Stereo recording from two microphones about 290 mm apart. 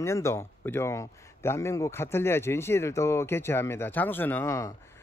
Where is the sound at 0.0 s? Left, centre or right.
Centre.